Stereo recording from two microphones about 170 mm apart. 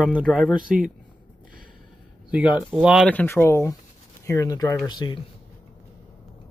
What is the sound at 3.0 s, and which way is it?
Speech, 10° left (ahead or behind).